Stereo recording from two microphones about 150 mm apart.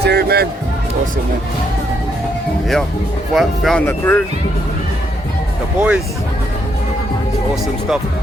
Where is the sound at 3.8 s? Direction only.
15° left (ahead or behind).